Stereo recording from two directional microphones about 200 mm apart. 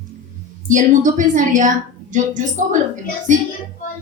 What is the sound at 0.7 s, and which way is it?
A woman's voice, 40° right (ahead or behind).